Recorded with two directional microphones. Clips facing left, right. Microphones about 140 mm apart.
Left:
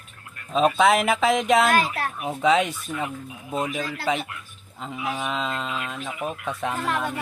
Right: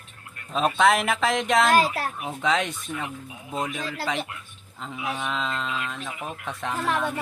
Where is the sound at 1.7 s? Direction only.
35° right (ahead or behind).